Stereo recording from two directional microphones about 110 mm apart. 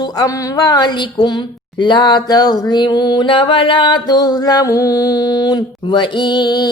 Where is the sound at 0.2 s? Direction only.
35° left (ahead or behind).